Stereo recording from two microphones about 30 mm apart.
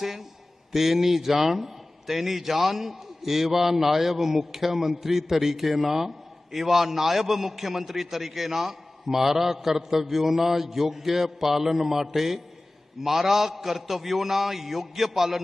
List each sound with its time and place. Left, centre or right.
0.0 s a man's voice: centre